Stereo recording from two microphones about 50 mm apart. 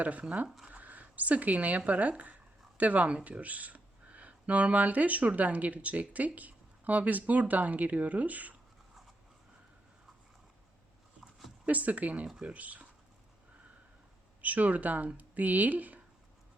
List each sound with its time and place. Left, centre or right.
0.0 s speech: right
0.4 s speech: centre
0.7 s speech: right
11.2 s a sound: centre
11.6 s speech: right
14.4 s speech: right